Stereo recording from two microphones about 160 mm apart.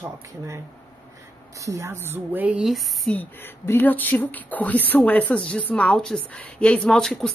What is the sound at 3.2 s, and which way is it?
Speech, 10° left (ahead or behind).